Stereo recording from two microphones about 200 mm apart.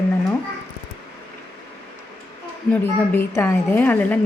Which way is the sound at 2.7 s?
10° left (ahead or behind).